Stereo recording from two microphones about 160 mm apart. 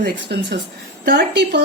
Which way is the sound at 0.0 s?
90° right.